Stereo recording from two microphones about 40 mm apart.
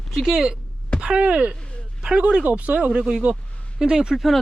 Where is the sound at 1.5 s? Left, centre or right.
Left.